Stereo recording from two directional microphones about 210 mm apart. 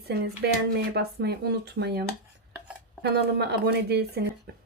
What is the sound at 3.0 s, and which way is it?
A woman's voice, 50° right (ahead or behind).